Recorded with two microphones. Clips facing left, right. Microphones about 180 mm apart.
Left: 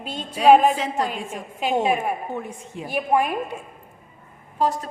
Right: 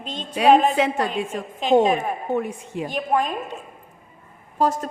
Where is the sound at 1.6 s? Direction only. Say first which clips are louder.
Right 6 dB; 10° left (ahead or behind).